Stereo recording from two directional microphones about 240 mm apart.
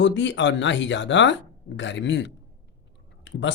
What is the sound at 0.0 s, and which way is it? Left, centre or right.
Speech, left.